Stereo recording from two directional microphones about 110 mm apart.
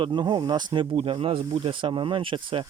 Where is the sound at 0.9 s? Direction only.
55° right (ahead or behind).